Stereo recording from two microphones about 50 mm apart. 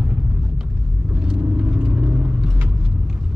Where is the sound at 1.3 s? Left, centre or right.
Right.